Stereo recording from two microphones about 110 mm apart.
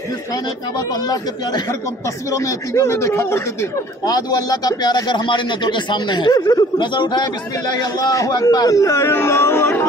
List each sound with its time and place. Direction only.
1.0 s a man's voice: 35° left (ahead or behind)
4.0 s a man's voice: 35° left (ahead or behind)